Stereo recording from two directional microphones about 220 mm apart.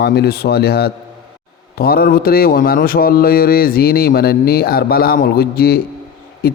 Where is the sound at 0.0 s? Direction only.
45° left (ahead or behind).